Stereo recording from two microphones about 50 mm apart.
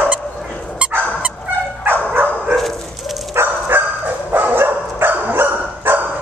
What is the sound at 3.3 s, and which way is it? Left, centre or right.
Dog, right.